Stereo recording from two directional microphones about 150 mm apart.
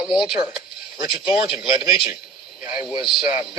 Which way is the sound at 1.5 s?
5° right (ahead or behind).